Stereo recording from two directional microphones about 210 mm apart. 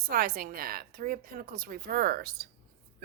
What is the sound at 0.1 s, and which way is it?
A woman's voice, 45° right (ahead or behind).